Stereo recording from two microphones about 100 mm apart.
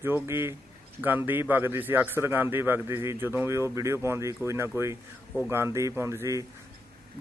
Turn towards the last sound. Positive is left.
turn(degrees=-30)  # may be behind; listen again after turning